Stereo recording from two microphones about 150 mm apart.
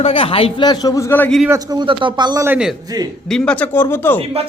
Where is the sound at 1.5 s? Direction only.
25° right (ahead or behind).